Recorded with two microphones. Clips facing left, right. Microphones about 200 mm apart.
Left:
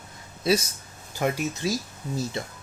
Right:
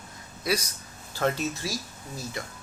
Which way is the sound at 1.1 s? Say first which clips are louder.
Left 1 dB; 10° left (ahead or behind).